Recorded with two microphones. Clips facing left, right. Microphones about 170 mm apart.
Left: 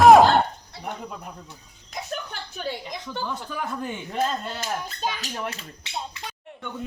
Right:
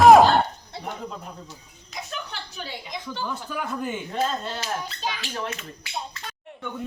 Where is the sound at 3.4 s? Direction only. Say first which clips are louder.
Right 1 dB; 5° right (ahead or behind).